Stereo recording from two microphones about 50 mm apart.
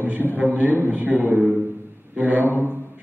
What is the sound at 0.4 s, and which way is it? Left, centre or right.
A man's voice, right.